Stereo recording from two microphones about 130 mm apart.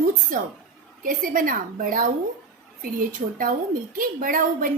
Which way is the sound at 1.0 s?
90° right.